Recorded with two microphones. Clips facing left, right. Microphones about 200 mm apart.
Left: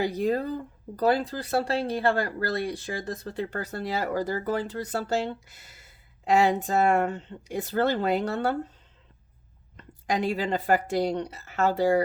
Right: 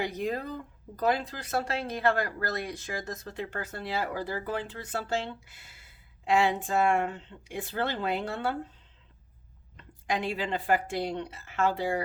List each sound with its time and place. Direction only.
0.0 s speech: 35° left (ahead or behind)
9.7 s speech: 40° left (ahead or behind)